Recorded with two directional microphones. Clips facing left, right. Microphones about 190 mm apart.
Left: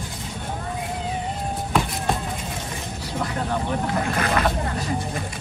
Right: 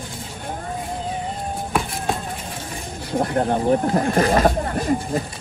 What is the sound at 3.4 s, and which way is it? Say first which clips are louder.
Speech: right 6 dB; 40° right (ahead or behind).